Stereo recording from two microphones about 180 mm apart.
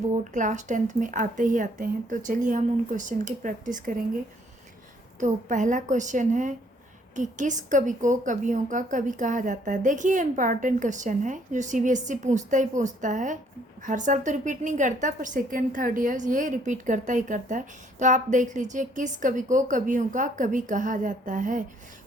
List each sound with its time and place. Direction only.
0.1 s a woman's voice: 45° right (ahead or behind)
5.2 s a woman's voice: 45° right (ahead or behind)